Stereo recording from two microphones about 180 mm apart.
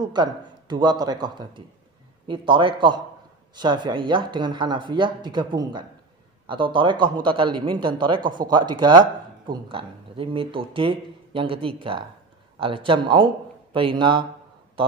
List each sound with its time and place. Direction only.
0.0 s speech: 25° right (ahead or behind)